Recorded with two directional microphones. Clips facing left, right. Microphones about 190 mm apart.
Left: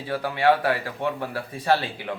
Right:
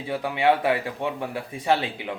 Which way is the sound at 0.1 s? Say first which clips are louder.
Left 1 dB; 20° right (ahead or behind).